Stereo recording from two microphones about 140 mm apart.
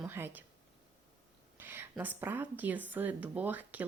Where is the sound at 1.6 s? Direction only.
15° right (ahead or behind).